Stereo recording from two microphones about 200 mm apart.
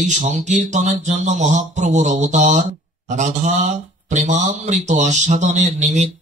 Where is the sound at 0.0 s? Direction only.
35° right (ahead or behind).